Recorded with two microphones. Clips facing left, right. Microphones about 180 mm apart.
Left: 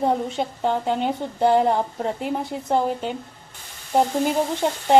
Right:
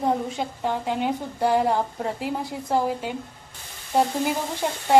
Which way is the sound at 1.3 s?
25° left (ahead or behind).